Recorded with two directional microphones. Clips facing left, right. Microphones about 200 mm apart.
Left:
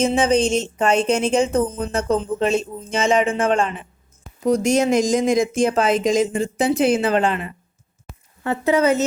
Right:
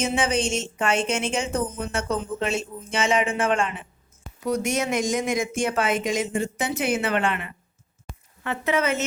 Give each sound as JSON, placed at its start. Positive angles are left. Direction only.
{"t": 0.0, "sound": "speech", "side_deg": 35}
{"t": 8.1, "sound": "a sound", "side_deg": 0}
{"t": 8.4, "sound": "speech", "side_deg": 35}